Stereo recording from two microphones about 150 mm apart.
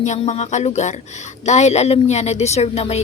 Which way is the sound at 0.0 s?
50° left (ahead or behind).